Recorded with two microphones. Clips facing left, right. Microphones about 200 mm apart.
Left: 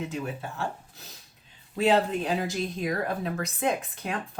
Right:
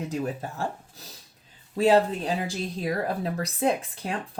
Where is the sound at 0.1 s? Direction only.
40° right (ahead or behind).